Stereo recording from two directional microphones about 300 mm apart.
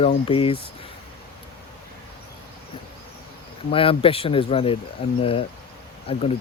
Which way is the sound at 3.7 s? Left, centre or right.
Centre.